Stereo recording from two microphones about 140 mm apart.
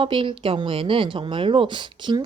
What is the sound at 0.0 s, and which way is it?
Speech, 35° right (ahead or behind).